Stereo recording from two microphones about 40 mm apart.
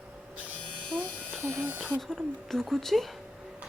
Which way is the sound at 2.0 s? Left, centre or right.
Centre.